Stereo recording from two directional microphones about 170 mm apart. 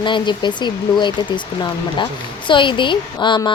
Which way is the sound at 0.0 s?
30° left (ahead or behind).